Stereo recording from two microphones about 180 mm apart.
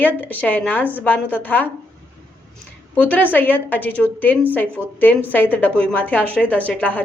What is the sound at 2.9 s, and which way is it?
A woman's voice, 10° left (ahead or behind).